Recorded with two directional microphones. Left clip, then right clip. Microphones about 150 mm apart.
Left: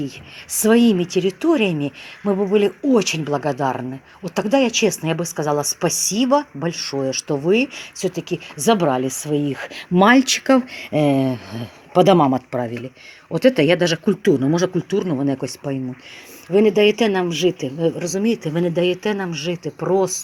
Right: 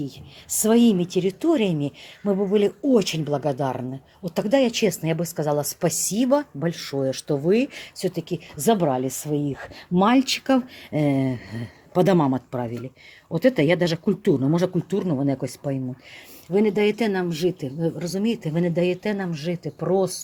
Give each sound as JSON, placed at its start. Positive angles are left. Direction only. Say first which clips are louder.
{"t": 0.6, "sound": "speech", "louder": "left 4 dB", "side_deg": -15}
{"t": 16.7, "sound": "speech", "louder": "left 6 dB", "side_deg": -90}
{"t": 17.0, "sound": "speech", "louder": "left 5 dB", "side_deg": -15}